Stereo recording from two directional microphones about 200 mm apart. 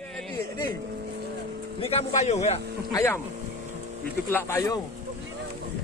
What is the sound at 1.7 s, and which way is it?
Speech, 30° left (ahead or behind).